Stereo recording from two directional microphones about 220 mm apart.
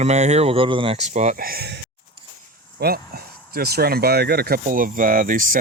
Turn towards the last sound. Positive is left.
turn(degrees=-40)  # may be behind; listen again after turning